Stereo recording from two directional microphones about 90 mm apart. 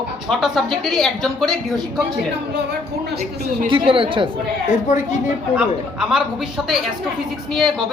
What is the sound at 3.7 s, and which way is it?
Speech, 75° right (ahead or behind).